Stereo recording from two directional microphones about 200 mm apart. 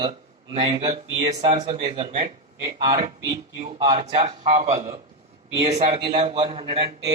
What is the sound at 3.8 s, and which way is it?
Speech, 25° right (ahead or behind).